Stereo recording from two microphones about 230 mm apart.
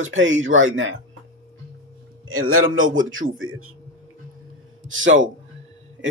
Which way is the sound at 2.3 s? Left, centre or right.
Right.